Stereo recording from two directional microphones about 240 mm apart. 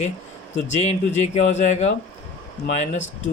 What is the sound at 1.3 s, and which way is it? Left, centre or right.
Speech, left.